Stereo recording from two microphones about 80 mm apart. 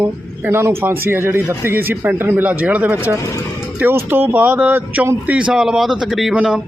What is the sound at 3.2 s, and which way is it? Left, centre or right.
Speech, left.